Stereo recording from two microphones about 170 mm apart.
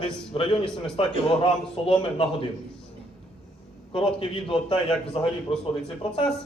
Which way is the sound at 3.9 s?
30° left (ahead or behind).